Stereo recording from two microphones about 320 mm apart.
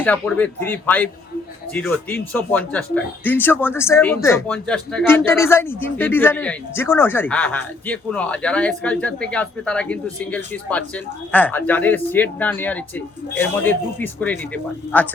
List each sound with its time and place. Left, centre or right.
0.0 s speech: centre